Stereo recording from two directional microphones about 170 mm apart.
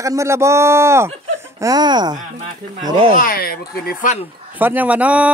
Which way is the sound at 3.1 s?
60° left (ahead or behind).